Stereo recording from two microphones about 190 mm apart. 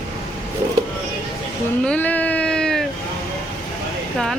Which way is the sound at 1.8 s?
5° left (ahead or behind).